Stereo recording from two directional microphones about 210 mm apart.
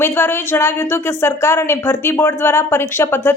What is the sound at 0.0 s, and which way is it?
A woman's voice, 10° left (ahead or behind).